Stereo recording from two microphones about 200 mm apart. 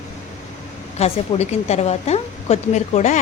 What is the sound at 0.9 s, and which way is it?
Speech, 30° left (ahead or behind).